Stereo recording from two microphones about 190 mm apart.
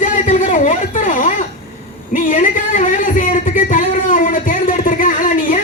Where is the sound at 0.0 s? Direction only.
40° left (ahead or behind).